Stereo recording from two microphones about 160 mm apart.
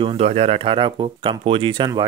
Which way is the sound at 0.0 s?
35° right (ahead or behind).